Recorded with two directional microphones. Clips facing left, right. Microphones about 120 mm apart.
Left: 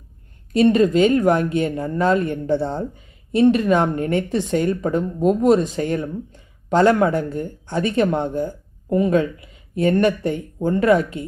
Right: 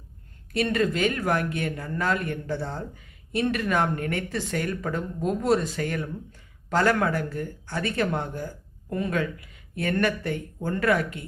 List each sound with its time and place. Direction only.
0.5 s speech: 20° left (ahead or behind)